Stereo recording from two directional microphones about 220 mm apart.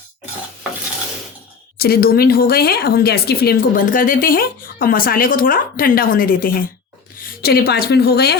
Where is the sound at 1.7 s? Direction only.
45° left (ahead or behind).